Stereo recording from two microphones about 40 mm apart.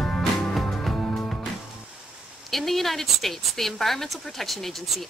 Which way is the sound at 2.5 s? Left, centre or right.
Centre.